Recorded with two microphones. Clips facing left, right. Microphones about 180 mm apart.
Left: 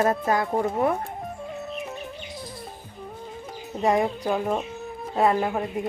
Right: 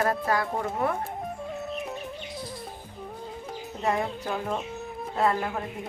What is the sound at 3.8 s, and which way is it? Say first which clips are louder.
Speech: left 6 dB; 15° left (ahead or behind).